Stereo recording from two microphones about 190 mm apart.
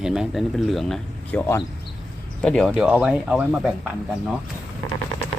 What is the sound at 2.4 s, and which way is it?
Speech, 5° left (ahead or behind).